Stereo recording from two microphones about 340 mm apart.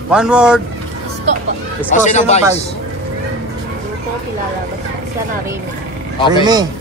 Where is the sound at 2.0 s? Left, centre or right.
Left.